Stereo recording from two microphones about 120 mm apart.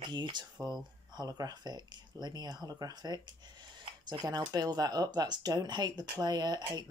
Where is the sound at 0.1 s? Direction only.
40° right (ahead or behind).